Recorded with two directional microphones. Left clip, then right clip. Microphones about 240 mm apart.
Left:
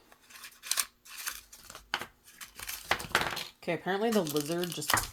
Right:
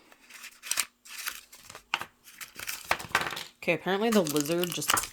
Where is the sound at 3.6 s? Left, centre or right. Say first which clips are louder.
Right 4 dB; right.